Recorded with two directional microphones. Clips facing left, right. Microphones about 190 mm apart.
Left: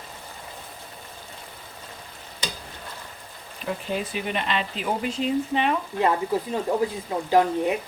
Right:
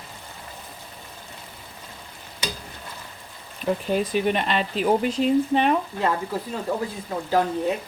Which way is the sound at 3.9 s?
45° right (ahead or behind).